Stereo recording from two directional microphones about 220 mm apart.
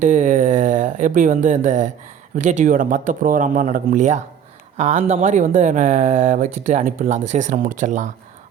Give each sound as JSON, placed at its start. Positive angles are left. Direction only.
{"t": 0.0, "sound": "speech", "side_deg": -35}